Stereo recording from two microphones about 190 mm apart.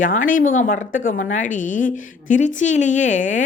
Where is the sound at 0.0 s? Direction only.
45° left (ahead or behind).